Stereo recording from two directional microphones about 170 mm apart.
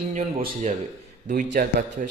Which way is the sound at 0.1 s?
45° right (ahead or behind).